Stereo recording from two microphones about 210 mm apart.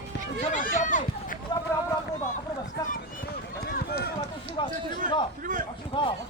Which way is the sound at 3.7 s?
45° left (ahead or behind).